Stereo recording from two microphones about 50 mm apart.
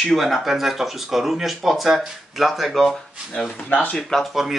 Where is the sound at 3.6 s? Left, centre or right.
Left.